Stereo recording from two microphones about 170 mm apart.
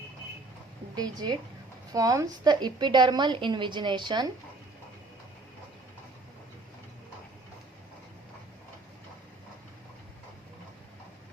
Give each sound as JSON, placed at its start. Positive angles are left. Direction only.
{"t": 0.9, "sound": "a woman's voice", "side_deg": -25}